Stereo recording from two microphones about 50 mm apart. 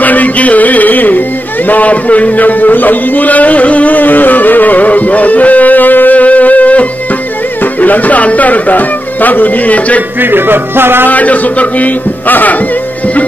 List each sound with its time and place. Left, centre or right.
0.0 s music: left
1.7 s a sound: left
7.8 s speech: left
10.2 s speech: right
11.1 s speech: left